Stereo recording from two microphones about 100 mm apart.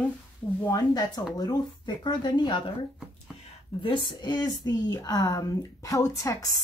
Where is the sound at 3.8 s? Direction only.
55° left (ahead or behind); by 6.5 s 30° left (ahead or behind).